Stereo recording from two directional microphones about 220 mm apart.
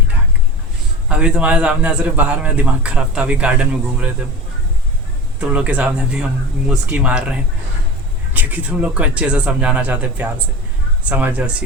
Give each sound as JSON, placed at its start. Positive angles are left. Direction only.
{"t": 1.1, "sound": "a man's voice", "side_deg": -5}
{"t": 5.4, "sound": "a man's voice", "side_deg": -5}